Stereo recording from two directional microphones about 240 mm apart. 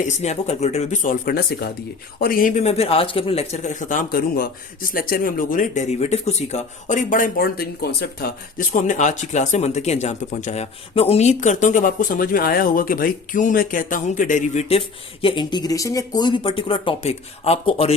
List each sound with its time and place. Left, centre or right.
0.0 s speech: left